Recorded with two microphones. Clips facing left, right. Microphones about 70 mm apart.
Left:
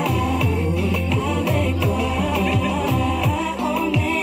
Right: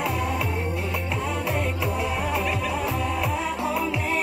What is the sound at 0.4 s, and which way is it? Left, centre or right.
Music, right.